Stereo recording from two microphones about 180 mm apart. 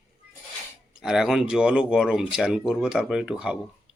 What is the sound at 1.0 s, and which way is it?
Speech, 5° right (ahead or behind).